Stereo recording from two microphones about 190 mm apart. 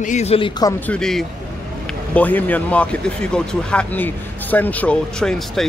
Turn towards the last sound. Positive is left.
turn(degrees=5)  # may be behind; listen again after turning